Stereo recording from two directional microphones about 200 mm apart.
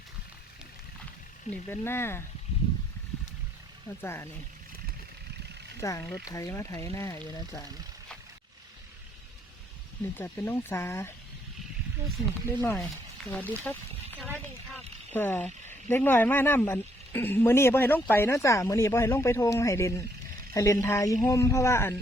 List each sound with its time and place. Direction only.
1.5 s speech: 10° left (ahead or behind)
4.0 s speech: 15° left (ahead or behind)
5.8 s speech: 15° left (ahead or behind)
10.2 s speech: 10° left (ahead or behind)
12.5 s speech: 10° left (ahead or behind)
13.3 s a sound: 10° left (ahead or behind)
14.3 s speech: 5° left (ahead or behind)